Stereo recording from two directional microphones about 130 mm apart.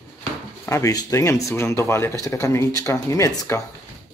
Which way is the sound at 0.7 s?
25° left (ahead or behind).